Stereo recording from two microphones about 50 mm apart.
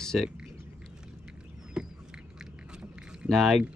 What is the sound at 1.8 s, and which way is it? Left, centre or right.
Duck, centre.